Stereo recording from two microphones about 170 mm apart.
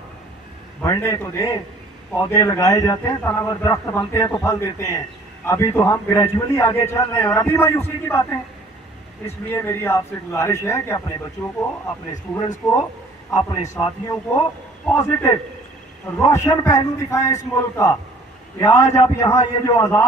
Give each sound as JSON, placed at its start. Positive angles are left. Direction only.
{"t": 0.8, "sound": "a man's voice", "side_deg": 15}
{"t": 9.5, "sound": "a man's voice", "side_deg": 15}
{"t": 12.4, "sound": "a man's voice", "side_deg": 20}